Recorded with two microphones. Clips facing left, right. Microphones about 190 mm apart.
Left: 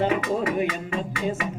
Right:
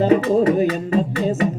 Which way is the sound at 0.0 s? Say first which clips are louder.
Right 8 dB; 35° right (ahead or behind).